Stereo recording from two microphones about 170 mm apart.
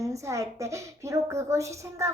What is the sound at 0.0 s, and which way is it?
A woman's voice, 20° right (ahead or behind).